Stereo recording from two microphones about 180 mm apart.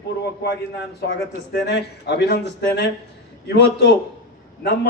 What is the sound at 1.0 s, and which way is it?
A man's voice, 65° left (ahead or behind).